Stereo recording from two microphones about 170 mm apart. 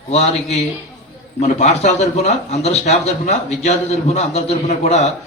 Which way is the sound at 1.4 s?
40° left (ahead or behind).